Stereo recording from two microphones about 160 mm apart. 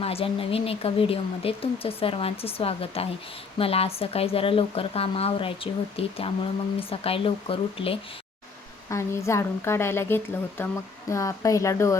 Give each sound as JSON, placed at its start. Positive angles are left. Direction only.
{"t": 0.0, "sound": "speech", "side_deg": 35}
{"t": 8.9, "sound": "a woman's voice", "side_deg": 15}